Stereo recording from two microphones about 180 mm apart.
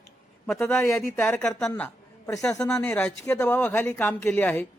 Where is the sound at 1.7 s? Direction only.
15° left (ahead or behind).